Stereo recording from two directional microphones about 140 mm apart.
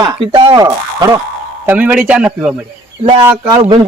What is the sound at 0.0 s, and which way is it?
Speech, 35° right (ahead or behind).